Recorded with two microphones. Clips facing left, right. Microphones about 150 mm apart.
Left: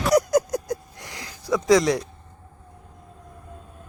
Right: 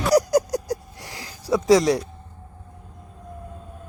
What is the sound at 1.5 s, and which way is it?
Speech, 35° right (ahead or behind).